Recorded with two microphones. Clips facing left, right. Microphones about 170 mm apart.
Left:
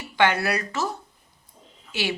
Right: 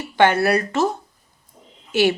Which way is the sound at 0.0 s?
50° right (ahead or behind).